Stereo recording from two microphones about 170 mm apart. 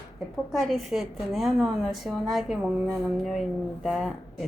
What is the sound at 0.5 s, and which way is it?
A woman's voice, centre (ahead or behind).